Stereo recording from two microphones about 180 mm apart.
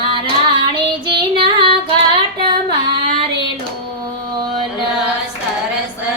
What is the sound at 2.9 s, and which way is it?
Child singing, 30° right (ahead or behind).